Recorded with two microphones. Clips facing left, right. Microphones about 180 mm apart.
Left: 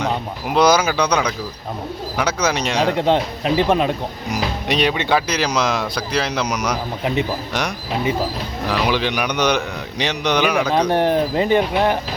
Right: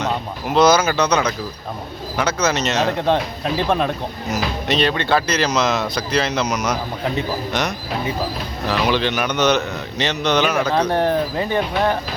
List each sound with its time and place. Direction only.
0.5 s a man's voice: 10° left (ahead or behind)
8.9 s a man's voice: 10° left (ahead or behind)